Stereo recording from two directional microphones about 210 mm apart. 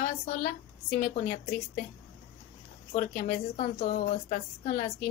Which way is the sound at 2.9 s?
40° left (ahead or behind).